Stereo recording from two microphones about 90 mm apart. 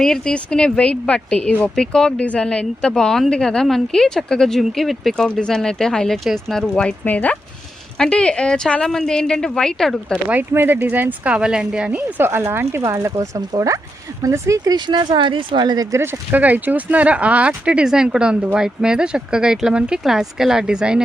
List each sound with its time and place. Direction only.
0.0 s speech: 5° left (ahead or behind)
7.0 s speech: 20° left (ahead or behind)
10.2 s speech: 20° right (ahead or behind)
11.9 s speech: 25° right (ahead or behind); by 16.0 s 40° right (ahead or behind)
16.3 s speech: 20° right (ahead or behind)